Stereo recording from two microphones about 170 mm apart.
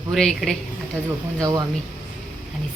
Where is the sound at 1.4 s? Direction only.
20° right (ahead or behind).